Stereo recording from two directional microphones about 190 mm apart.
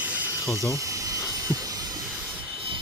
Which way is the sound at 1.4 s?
20° right (ahead or behind).